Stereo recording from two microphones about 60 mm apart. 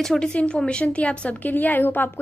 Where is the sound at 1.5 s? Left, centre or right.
Left.